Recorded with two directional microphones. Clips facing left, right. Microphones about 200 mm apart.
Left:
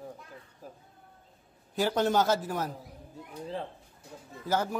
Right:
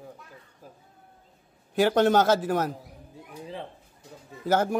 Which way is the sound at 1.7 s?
70° right (ahead or behind).